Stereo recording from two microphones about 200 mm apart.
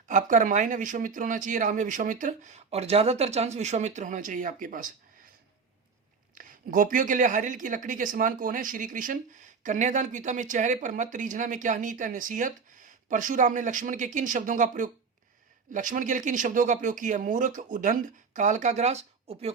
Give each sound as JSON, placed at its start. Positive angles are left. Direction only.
{"t": 0.1, "sound": "speech", "side_deg": -40}
{"t": 6.3, "sound": "speech", "side_deg": -45}